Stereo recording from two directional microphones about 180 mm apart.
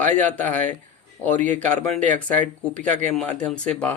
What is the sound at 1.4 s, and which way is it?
Speech, 40° right (ahead or behind).